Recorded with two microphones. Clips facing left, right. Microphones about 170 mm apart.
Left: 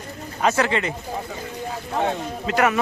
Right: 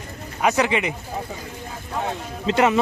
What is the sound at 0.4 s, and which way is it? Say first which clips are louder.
Speech: right 1 dB; 15° right (ahead or behind).